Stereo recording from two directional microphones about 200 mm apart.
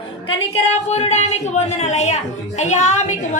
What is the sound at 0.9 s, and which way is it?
A woman's voice, 35° left (ahead or behind).